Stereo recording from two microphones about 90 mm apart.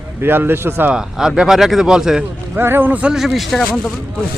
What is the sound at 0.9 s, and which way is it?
Speech, 5° right (ahead or behind).